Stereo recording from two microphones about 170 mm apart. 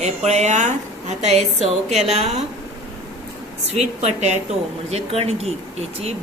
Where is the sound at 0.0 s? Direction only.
40° right (ahead or behind).